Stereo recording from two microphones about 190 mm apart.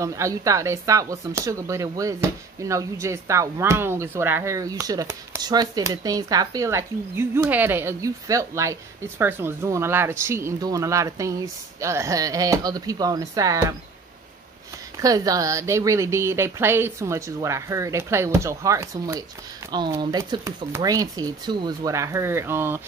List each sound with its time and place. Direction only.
0.0 s speech: 15° right (ahead or behind)
15.0 s speech: 20° right (ahead or behind)